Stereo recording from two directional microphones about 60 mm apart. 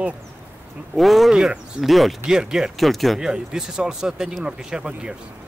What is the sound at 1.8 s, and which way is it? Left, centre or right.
Speech, centre.